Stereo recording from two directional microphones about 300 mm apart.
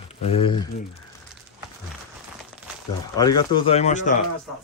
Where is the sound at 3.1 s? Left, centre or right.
Centre.